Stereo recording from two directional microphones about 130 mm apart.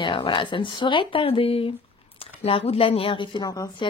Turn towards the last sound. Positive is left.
turn(degrees=35)  # may be behind; listen again after turning